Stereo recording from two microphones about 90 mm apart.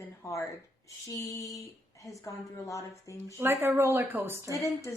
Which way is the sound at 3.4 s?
25° right (ahead or behind).